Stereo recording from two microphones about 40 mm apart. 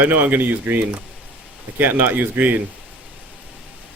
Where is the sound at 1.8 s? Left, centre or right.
Right.